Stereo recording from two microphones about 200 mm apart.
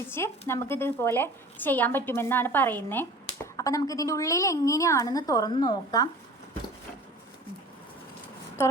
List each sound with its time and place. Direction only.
0.1 s a woman's voice: 10° left (ahead or behind)